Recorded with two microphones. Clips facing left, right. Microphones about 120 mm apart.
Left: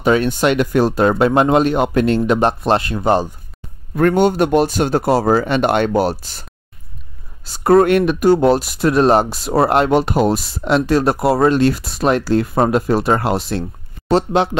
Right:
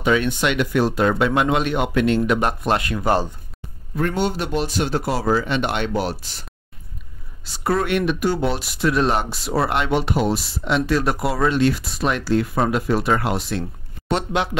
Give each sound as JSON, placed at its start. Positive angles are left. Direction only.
{"t": 0.0, "sound": "speech", "side_deg": 40}
{"t": 3.9, "sound": "speech", "side_deg": 55}
{"t": 7.4, "sound": "speech", "side_deg": 45}